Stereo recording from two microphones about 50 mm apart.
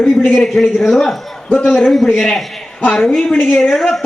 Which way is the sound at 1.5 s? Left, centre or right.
Left.